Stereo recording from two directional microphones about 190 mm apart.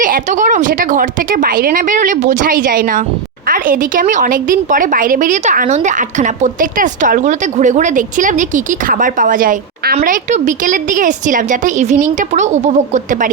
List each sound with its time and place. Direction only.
0.0 s a woman's voice: 45° right (ahead or behind)